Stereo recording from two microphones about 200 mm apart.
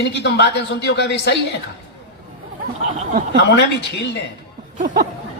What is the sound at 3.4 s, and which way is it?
Speech, 60° left (ahead or behind).